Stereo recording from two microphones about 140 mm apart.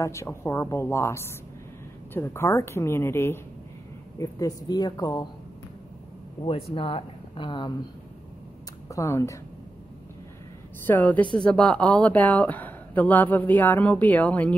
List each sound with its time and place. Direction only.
0.0 s a woman's voice: 20° left (ahead or behind)
6.4 s speech: 40° left (ahead or behind)
8.8 s speech: 20° left (ahead or behind)
10.9 s a woman's voice: 10° left (ahead or behind)